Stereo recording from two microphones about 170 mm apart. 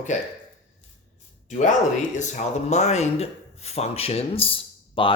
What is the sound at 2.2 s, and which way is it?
Speech, 45° left (ahead or behind).